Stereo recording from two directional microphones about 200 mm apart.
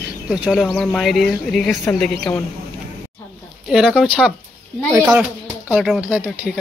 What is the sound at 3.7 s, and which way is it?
Speech, 5° right (ahead or behind).